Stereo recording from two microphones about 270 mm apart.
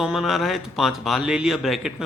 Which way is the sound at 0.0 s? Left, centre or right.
Centre.